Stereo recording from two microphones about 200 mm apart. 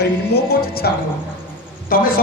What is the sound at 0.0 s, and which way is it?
Music, 50° left (ahead or behind).